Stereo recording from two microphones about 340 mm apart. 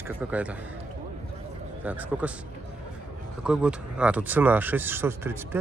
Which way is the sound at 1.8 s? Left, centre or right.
Centre.